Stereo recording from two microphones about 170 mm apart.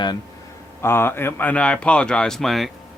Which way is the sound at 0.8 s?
15° left (ahead or behind).